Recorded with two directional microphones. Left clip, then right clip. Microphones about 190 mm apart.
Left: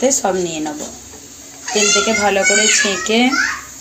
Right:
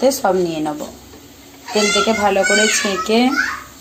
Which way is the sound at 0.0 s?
Centre (ahead or behind).